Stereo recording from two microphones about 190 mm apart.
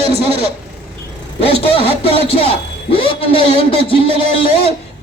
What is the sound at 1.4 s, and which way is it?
A man's voice, 30° left (ahead or behind).